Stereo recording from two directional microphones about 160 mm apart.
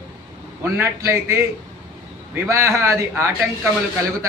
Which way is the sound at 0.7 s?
15° right (ahead or behind).